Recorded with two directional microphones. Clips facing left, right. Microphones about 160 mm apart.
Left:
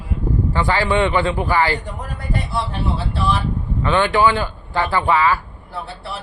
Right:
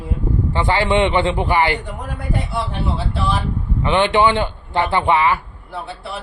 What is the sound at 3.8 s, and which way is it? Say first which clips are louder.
A man's voice: right 1 dB; 20° right (ahead or behind).